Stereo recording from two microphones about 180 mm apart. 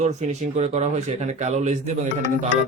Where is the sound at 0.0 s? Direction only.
40° right (ahead or behind).